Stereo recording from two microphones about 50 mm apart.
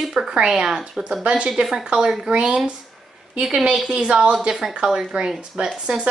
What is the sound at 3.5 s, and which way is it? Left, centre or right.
A woman's voice, centre.